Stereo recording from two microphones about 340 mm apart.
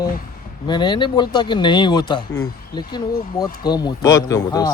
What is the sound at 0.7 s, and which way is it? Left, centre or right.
Speech, centre.